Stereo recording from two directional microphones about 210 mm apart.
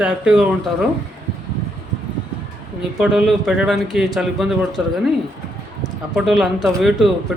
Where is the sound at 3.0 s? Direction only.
5° right (ahead or behind).